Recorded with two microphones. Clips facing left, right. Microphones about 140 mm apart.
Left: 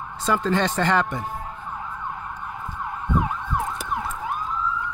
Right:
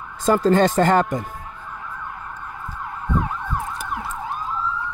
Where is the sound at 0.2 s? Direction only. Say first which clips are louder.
Right 6 dB; 45° right (ahead or behind).